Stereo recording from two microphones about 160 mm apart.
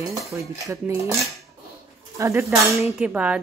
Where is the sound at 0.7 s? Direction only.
20° right (ahead or behind).